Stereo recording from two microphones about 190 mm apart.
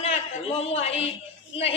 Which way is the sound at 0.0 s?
35° left (ahead or behind).